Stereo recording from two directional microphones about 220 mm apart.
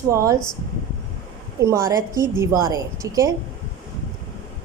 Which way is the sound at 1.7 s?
15° right (ahead or behind).